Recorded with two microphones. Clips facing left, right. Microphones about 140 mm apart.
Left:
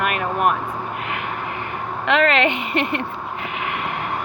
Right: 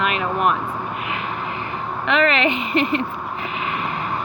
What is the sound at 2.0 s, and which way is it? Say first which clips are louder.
Speech: left 1 dB; 65° left (ahead or behind).